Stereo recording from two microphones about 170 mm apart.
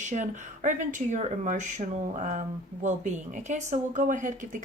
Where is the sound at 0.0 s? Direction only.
45° right (ahead or behind).